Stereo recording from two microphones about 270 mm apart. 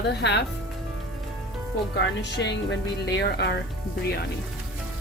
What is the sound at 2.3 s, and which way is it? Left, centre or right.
Speech, left.